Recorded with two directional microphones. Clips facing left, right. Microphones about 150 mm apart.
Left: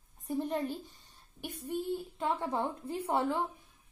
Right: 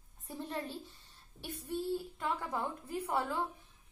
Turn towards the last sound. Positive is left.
turn(degrees=25)  # may be behind; listen again after turning